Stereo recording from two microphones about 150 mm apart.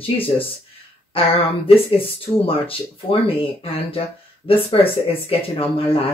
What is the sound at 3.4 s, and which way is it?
Speech, 40° left (ahead or behind).